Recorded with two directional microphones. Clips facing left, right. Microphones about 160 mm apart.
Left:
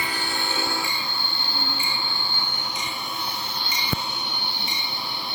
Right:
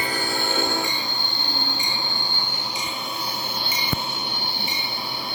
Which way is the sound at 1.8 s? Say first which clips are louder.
Right 1 dB; 40° right (ahead or behind).